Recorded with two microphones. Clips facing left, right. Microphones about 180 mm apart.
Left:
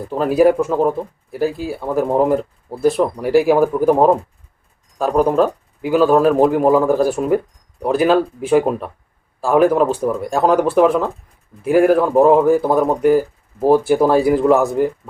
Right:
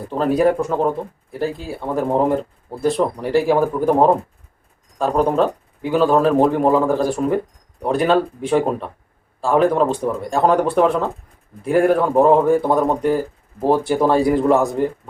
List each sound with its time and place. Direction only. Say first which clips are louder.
0.1 s speech: left 3 dB; 5° left (ahead or behind)